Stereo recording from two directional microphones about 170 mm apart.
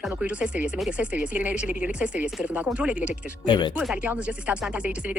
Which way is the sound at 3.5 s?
25° left (ahead or behind).